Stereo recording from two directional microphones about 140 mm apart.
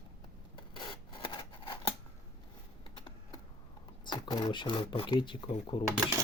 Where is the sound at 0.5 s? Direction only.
35° left (ahead or behind).